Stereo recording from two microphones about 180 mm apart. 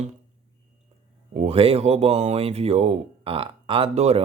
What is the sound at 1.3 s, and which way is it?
Speech, 35° right (ahead or behind).